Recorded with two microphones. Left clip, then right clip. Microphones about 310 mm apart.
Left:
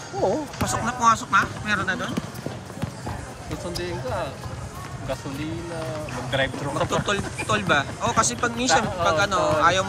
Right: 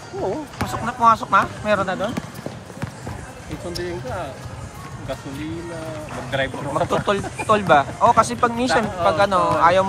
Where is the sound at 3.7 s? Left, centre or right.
Centre.